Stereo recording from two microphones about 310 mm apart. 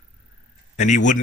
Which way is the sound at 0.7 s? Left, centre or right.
Left.